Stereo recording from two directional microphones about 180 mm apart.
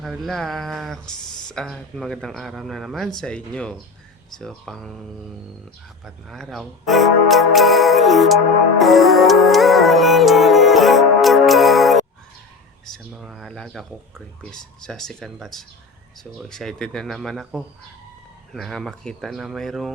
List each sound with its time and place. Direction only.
0.0 s speech: centre (ahead or behind)
6.1 s speech: centre (ahead or behind)
8.8 s music: centre (ahead or behind)
12.8 s speech: centre (ahead or behind)